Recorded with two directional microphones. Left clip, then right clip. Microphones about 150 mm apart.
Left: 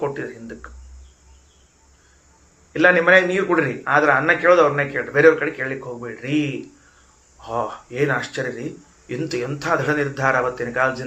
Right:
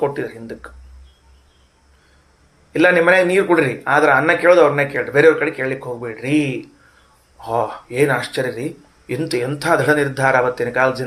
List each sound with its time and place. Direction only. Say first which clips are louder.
0.0 s a man's voice: right 5 dB; 30° right (ahead or behind)
2.7 s a man's voice: right 1 dB; 35° right (ahead or behind)